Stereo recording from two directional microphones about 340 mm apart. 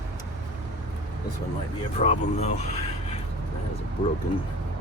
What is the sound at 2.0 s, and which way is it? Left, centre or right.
Speech, centre.